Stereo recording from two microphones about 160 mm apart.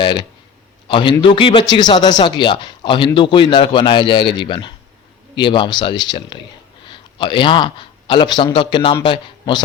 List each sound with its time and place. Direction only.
0.0 s a man's voice: 30° left (ahead or behind)